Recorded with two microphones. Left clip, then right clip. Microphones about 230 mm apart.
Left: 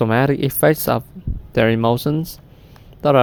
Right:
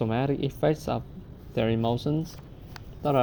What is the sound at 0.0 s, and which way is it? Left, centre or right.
Speech, left.